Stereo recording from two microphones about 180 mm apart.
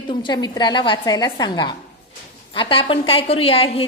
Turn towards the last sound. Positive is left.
turn(degrees=30)  # may be behind; listen again after turning